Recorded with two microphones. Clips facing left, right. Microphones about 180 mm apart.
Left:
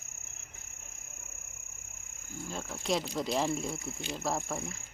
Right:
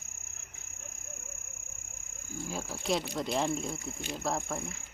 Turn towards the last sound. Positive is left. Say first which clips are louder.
# even
turn(degrees=0)  # may be behind; listen again after turning